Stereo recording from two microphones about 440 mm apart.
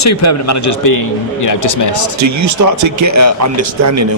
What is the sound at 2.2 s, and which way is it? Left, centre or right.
Speech, right.